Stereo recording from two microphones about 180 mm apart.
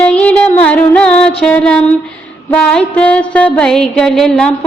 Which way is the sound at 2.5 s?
5° left (ahead or behind).